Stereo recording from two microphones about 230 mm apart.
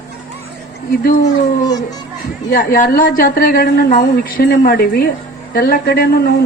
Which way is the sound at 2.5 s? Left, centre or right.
Left.